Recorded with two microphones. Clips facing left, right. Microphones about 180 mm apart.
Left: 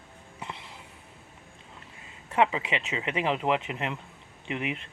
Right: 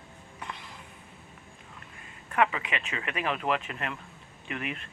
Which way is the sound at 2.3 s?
25° left (ahead or behind).